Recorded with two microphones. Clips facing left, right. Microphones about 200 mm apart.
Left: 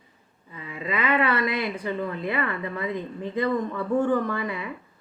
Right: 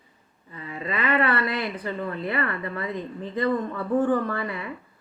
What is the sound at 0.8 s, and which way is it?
A woman's voice, 15° left (ahead or behind).